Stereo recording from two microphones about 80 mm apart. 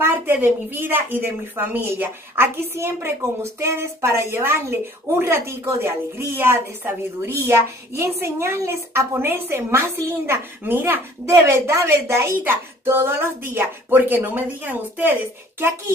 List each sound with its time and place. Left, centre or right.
0.0 s a woman's voice: right
11.2 s a woman's voice: right